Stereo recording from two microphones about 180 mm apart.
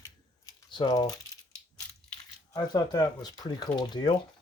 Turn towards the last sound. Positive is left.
turn(degrees=25)  # may be behind; listen again after turning